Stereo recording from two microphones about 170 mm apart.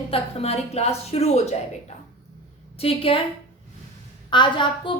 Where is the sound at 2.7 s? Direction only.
35° left (ahead or behind).